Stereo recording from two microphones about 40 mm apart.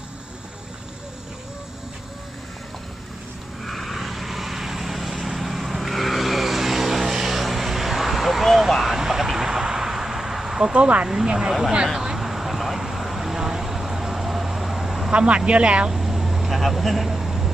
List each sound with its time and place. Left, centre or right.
3.6 s vehicle: centre
10.8 s speech: right
12.1 s vehicle: centre
15.1 s speech: right
15.9 s vehicle: centre